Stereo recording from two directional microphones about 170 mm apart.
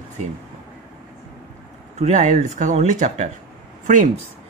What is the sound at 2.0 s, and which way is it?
Speech, 45° right (ahead or behind).